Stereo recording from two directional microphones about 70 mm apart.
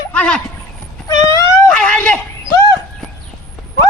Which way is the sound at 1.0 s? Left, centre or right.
Left.